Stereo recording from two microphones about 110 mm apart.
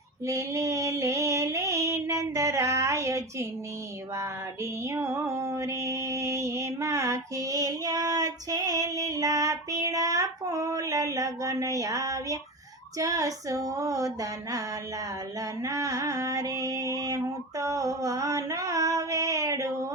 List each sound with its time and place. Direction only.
0.3 s female singing: 30° right (ahead or behind)
4.2 s music: 25° right (ahead or behind)
13.0 s speech: 30° right (ahead or behind)
15.4 s a sound: 30° right (ahead or behind)